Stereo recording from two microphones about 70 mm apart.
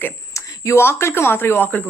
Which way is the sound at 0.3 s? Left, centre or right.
Left.